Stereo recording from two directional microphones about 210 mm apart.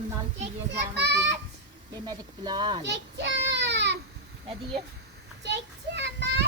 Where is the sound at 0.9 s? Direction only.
55° right (ahead or behind).